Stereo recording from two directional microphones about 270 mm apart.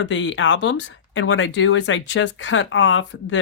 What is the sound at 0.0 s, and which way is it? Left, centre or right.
Speech, left.